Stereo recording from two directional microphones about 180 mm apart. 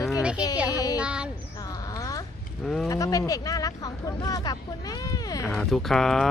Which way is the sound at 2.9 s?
20° left (ahead or behind).